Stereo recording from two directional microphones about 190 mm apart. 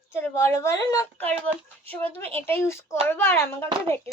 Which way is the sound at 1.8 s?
10° left (ahead or behind).